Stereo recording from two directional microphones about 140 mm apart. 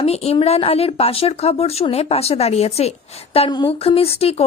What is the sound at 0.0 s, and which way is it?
Speech, 50° left (ahead or behind).